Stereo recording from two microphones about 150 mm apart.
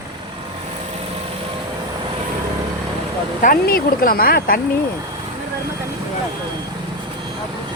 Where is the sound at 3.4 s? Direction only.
80° left.